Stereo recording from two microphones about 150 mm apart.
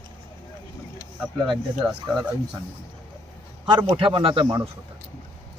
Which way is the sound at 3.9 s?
35° right (ahead or behind).